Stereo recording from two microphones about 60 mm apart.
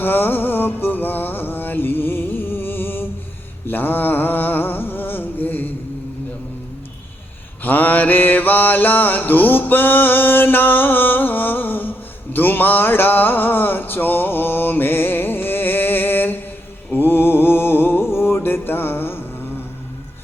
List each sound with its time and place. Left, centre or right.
0.0 s music: left
3.7 s a sound: left
7.6 s mantra: left